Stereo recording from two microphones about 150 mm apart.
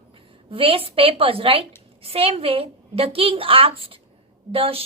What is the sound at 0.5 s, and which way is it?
A woman's voice, 40° right (ahead or behind).